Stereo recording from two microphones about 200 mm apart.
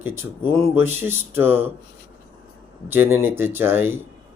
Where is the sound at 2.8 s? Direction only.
10° right (ahead or behind).